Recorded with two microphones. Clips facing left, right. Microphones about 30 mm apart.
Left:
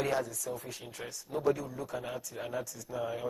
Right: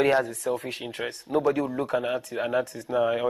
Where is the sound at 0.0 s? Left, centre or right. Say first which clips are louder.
Right 10 dB; right.